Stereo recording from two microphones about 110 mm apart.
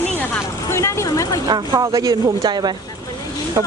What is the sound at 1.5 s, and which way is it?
Speech, 35° right (ahead or behind).